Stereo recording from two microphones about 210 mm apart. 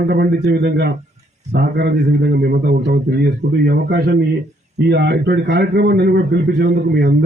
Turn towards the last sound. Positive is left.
turn(degrees=-50)  # may be behind; listen again after turning